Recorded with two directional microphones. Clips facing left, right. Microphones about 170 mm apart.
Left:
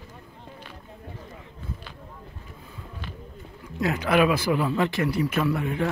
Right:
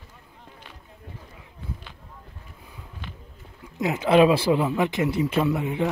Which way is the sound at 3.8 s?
20° right (ahead or behind).